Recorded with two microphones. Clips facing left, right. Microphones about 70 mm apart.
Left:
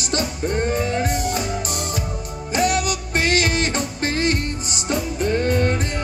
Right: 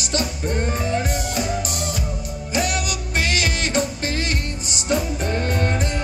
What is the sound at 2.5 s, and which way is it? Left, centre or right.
Music, left.